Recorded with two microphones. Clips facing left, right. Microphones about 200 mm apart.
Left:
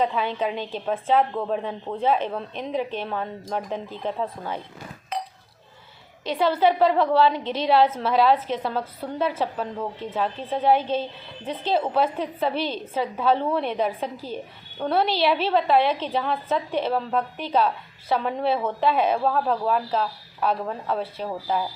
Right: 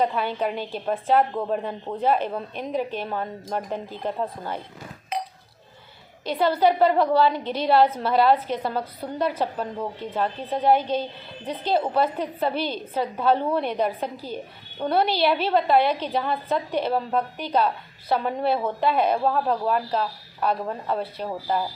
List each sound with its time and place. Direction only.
0.0 s a woman's voice: 5° right (ahead or behind)
6.2 s speech: 5° right (ahead or behind)
9.0 s speech: 5° left (ahead or behind)
12.0 s speech: 5° right (ahead or behind)